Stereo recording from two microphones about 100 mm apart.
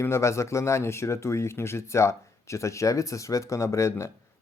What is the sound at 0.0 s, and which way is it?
Speech, 25° left (ahead or behind).